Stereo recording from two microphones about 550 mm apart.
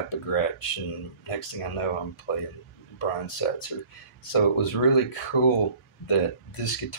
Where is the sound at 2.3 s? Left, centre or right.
Left.